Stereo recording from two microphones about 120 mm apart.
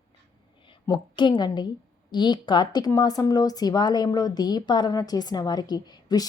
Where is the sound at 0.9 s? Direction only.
40° left (ahead or behind).